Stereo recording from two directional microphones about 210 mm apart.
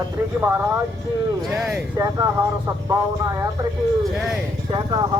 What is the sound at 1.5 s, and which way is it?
Speech, 5° right (ahead or behind).